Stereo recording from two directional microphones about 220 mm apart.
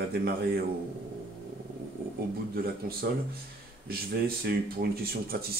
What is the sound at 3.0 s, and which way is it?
Speech, 45° right (ahead or behind).